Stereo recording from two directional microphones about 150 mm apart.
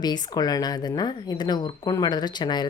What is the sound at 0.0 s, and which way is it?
Speech, 30° left (ahead or behind).